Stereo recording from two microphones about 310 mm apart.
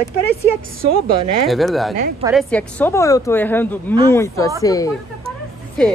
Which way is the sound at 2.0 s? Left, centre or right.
Right.